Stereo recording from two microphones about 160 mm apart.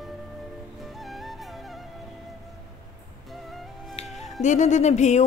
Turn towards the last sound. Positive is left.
turn(degrees=45)  # may be behind; listen again after turning